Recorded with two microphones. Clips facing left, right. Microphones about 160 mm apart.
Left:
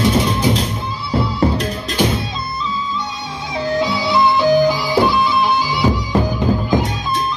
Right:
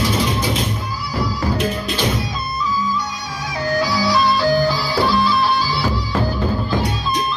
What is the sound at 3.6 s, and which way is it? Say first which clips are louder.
Music: even; 25° left (ahead or behind).